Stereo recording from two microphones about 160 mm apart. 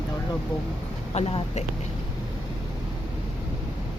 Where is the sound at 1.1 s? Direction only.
40° left (ahead or behind).